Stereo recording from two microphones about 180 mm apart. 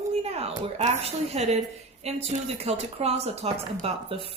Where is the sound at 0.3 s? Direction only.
35° right (ahead or behind).